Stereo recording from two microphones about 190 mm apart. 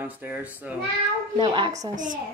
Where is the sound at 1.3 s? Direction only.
25° right (ahead or behind).